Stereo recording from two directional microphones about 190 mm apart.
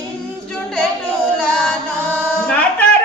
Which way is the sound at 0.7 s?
5° left (ahead or behind).